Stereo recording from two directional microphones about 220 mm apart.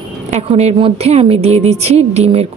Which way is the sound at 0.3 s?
30° right (ahead or behind).